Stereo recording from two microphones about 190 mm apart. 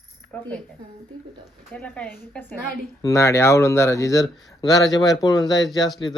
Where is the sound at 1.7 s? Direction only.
5° left (ahead or behind).